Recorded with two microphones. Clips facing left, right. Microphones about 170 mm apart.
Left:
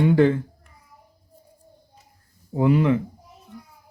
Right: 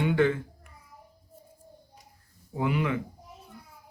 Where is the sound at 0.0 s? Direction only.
35° left (ahead or behind).